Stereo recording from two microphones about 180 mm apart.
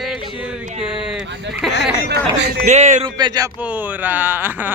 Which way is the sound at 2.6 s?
40° right (ahead or behind).